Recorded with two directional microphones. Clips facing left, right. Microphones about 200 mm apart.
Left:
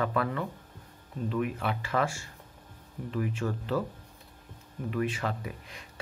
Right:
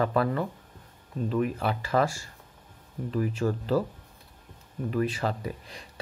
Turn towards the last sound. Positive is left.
turn(degrees=-35)  # may be behind; listen again after turning